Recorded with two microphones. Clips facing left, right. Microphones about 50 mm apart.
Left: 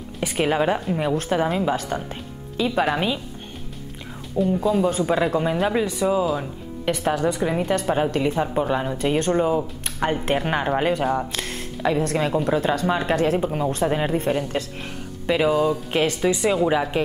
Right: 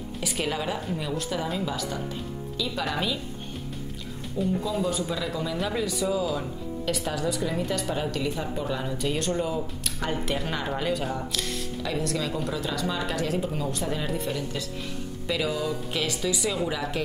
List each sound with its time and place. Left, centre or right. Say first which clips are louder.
0.2 s a woman's voice: left 9 dB; left
4.6 s a woman's voice: left 8 dB; left